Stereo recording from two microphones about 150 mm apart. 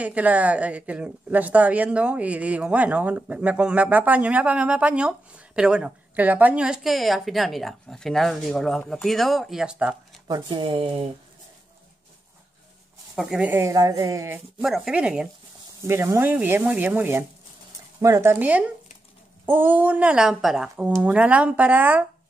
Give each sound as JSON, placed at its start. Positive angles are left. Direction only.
{"t": 0.0, "sound": "speech", "side_deg": -10}
{"t": 10.2, "sound": "speech", "side_deg": -30}
{"t": 13.1, "sound": "speech", "side_deg": -5}
{"t": 14.6, "sound": "speech", "side_deg": -5}
{"t": 15.8, "sound": "speech", "side_deg": -15}